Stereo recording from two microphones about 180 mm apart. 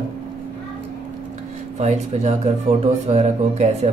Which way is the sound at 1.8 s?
35° right (ahead or behind).